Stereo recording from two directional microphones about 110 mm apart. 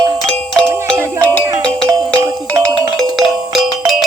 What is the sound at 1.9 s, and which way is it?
Music, 30° right (ahead or behind).